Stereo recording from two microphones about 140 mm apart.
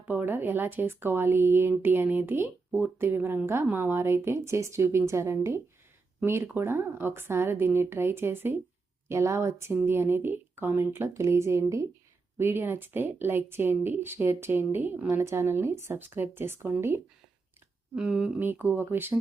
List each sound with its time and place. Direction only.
0.1 s speech: 15° right (ahead or behind)
17.9 s speech: 5° right (ahead or behind)